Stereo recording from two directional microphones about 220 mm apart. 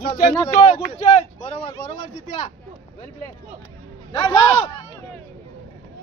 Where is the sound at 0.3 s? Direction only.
10° left (ahead or behind).